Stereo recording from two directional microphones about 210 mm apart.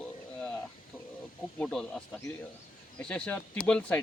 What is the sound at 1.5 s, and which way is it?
Speech, 5° left (ahead or behind).